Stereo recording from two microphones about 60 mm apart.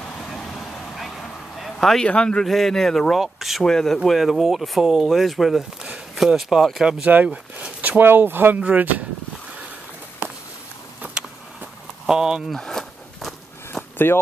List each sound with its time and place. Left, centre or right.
0.2 s vehicle: centre
2.0 s speech: centre
2.4 s speech: centre
3.6 s speech: centre
7.1 s speech: right
8.0 s speech: right
12.1 s speech: centre
12.5 s a sound: centre
14.1 s speech: left